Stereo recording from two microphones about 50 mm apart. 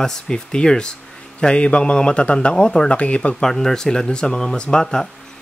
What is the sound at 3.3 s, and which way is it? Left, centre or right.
Speech, centre.